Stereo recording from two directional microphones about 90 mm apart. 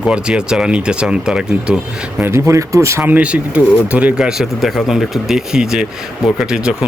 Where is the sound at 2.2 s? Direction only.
30° right (ahead or behind).